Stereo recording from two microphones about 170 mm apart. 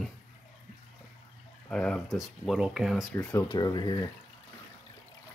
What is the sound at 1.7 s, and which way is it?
Speech, 5° left (ahead or behind).